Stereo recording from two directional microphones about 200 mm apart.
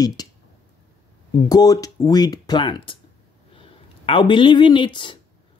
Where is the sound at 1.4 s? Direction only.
20° left (ahead or behind).